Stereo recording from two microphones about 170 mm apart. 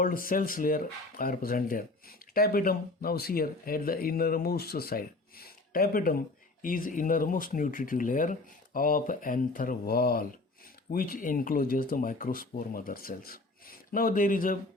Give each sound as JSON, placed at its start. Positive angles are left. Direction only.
{"t": 0.0, "sound": "speech", "side_deg": 55}